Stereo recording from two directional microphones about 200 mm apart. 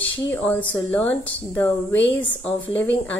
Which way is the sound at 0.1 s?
10° left (ahead or behind).